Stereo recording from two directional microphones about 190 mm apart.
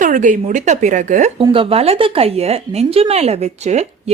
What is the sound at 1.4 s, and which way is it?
A woman's voice, 25° right (ahead or behind).